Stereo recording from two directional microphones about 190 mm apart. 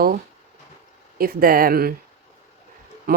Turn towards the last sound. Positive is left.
turn(degrees=-50)  # may be behind; listen again after turning